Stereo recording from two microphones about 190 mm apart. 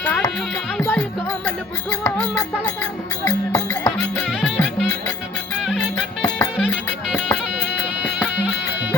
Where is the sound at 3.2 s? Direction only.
20° left (ahead or behind).